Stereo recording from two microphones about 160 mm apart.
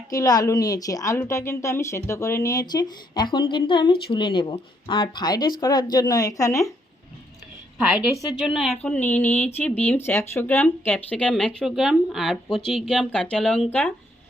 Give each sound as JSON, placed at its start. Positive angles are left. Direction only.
{"t": 0.1, "sound": "a woman's voice", "side_deg": 20}
{"t": 8.4, "sound": "a woman's voice", "side_deg": -5}
{"t": 8.8, "sound": "speech", "side_deg": 10}